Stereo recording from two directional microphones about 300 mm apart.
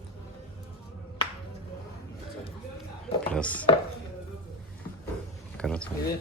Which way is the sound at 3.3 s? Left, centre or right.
Centre.